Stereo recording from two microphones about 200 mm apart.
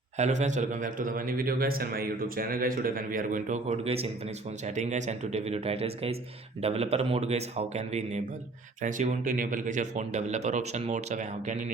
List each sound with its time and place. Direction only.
0.2 s a man's voice: 35° right (ahead or behind)